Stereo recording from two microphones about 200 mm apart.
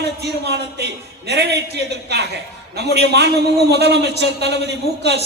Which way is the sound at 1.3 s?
55° right (ahead or behind).